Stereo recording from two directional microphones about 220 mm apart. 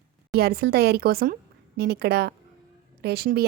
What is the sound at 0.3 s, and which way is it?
A woman's voice, 45° right (ahead or behind).